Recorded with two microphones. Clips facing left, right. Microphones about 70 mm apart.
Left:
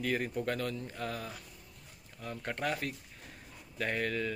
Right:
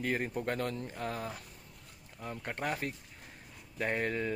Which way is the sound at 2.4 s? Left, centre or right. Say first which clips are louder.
Left 1 dB; right.